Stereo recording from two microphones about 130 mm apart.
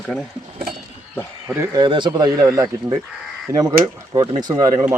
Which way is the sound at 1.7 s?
35° right (ahead or behind).